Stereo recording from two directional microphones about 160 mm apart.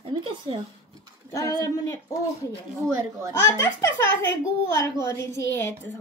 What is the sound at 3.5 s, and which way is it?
A woman's voice, 15° left (ahead or behind).